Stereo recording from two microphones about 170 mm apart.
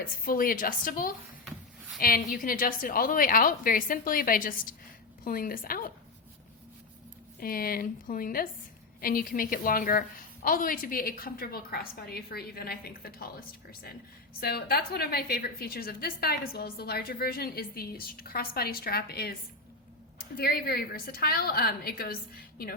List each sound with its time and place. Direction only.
0.0 s a woman's voice: 55° left (ahead or behind)
7.3 s a woman's voice: 60° left (ahead or behind)